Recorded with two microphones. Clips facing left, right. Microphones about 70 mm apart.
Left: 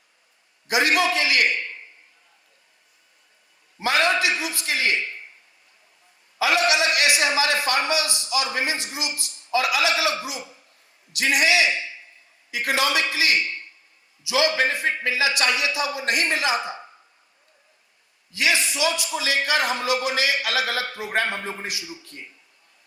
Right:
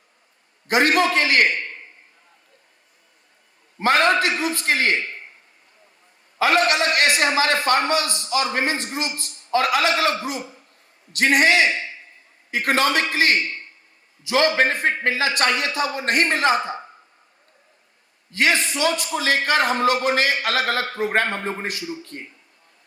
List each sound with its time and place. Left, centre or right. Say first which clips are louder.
0.7 s a man's voice: right 3 dB; right
3.8 s a man's voice: right 4 dB; right
6.4 s a man's voice: right 2 dB; right
18.3 s a man's voice: right 3 dB; right